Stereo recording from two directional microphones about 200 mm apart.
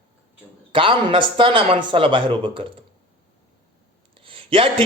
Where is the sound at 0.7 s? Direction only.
25° right (ahead or behind).